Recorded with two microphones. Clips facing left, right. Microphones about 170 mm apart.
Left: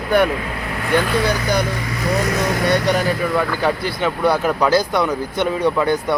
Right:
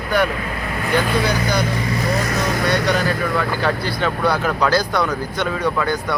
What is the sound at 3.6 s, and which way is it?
Speech, 15° left (ahead or behind).